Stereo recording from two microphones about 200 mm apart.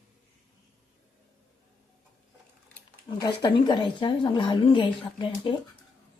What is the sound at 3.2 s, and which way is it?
Speech, 20° left (ahead or behind).